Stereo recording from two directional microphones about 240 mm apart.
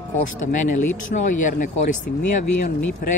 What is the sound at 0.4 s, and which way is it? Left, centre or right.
Speech, left.